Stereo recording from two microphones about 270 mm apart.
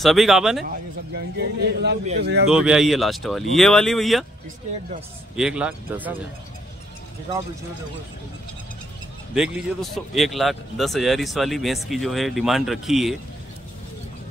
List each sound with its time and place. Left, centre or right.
0.0 s speech: centre
0.7 s speech: right
2.5 s speech: centre
5.3 s speech: centre
9.3 s speech: centre